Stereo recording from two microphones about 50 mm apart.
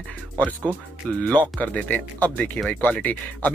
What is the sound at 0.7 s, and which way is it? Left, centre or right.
Speech, left.